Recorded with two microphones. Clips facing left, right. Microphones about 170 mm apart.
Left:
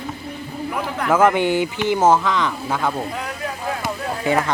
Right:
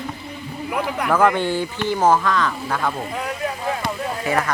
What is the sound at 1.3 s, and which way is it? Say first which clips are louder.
Speech: left 3 dB; 15° left (ahead or behind).